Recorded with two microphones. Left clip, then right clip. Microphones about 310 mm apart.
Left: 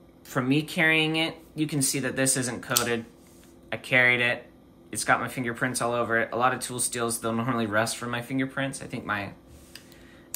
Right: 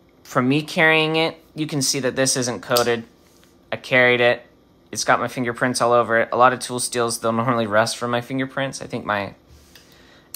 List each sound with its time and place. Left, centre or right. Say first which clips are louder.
0.3 s speech: right 6 dB; centre